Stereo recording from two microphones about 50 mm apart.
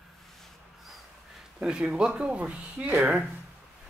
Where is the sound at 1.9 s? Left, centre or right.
Right.